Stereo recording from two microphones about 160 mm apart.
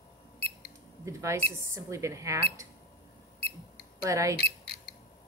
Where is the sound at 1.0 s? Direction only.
20° right (ahead or behind).